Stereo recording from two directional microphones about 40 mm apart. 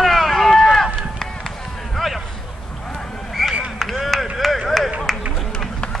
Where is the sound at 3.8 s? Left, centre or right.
Centre.